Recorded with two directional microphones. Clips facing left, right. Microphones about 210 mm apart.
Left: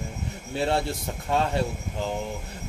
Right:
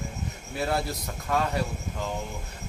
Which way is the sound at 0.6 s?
25° left (ahead or behind).